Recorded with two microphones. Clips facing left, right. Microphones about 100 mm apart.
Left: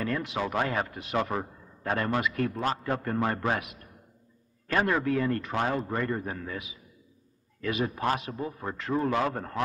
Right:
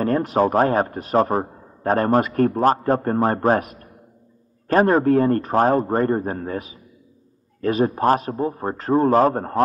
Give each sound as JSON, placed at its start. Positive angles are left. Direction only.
{"t": 0.0, "sound": "a man's voice", "side_deg": -40}